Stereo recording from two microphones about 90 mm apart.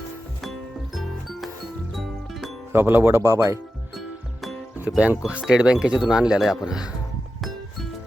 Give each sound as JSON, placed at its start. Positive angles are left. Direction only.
{"t": 2.7, "sound": "speech", "side_deg": -25}
{"t": 4.9, "sound": "speech", "side_deg": -15}